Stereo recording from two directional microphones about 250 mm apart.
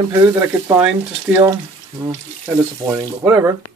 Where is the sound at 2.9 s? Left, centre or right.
Centre.